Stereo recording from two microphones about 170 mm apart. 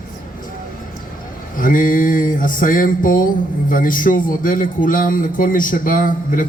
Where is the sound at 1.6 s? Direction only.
55° left (ahead or behind).